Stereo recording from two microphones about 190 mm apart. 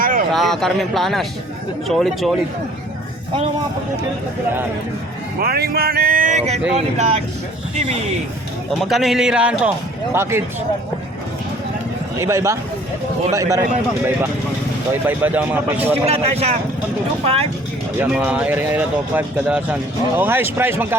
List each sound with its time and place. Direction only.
0.0 s a sound: 45° right (ahead or behind)
0.3 s speech: centre (ahead or behind)
5.4 s speech: 55° right (ahead or behind); by 7.2 s 35° right (ahead or behind)
8.8 s speech: centre (ahead or behind)
12.2 s speech: 15° right (ahead or behind)
16.0 s speech: 35° right (ahead or behind)
18.0 s speech: 10° right (ahead or behind)